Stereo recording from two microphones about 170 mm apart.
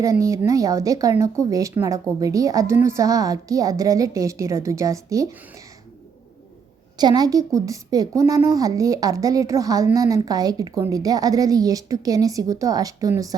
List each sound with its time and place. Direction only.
0.0 s a woman's voice: 20° right (ahead or behind)
7.0 s a woman's voice: 25° right (ahead or behind)